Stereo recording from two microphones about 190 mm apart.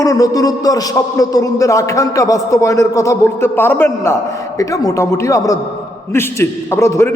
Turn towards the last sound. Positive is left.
turn(degrees=15)  # may be behind; listen again after turning